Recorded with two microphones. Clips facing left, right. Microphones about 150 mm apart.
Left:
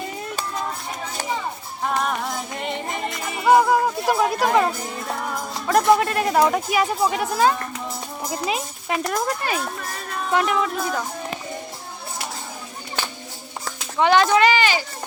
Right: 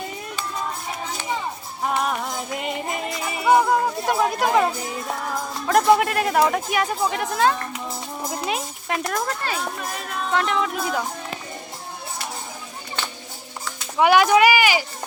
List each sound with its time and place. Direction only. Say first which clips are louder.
1.9 s music: even; 5° right (ahead or behind)
5.6 s a child's voice: even; centre (ahead or behind)
14.0 s speech: right 1 dB; 10° right (ahead or behind)